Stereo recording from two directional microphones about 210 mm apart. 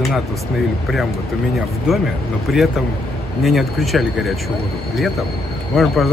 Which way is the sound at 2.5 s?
Centre (ahead or behind).